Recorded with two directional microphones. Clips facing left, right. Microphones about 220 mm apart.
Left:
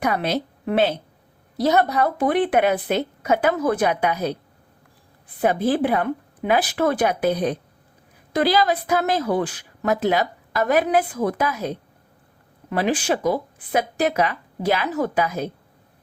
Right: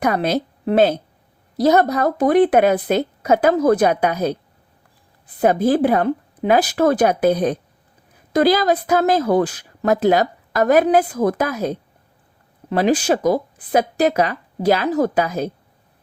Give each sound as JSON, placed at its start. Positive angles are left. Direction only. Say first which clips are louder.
{"t": 0.0, "sound": "a woman's voice", "louder": "right 4 dB", "side_deg": -45}
{"t": 5.4, "sound": "a woman's voice", "louder": "right 4 dB", "side_deg": -45}